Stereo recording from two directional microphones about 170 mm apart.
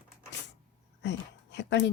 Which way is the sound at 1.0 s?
90° left.